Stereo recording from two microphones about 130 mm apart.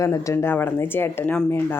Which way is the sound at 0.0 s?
25° left (ahead or behind).